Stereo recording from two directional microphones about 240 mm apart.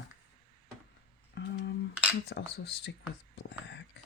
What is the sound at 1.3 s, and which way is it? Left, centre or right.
Speech, left.